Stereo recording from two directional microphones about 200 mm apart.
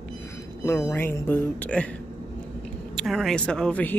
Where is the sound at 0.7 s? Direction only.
15° left (ahead or behind).